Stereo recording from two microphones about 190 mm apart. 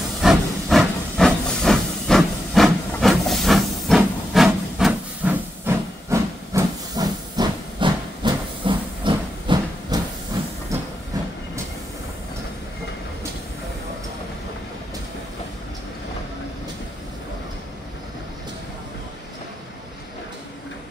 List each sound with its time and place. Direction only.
0.2 s hiss: centre (ahead or behind); by 10.5 s 20° right (ahead or behind)